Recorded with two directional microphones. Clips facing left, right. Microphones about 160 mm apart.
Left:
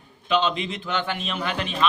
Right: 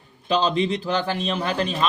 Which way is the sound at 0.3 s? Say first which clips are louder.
Right 3 dB; 35° right (ahead or behind).